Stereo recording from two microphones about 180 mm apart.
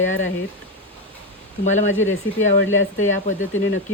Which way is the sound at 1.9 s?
90° left.